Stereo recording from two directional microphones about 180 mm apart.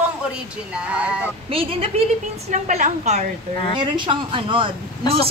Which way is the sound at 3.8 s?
25° right (ahead or behind).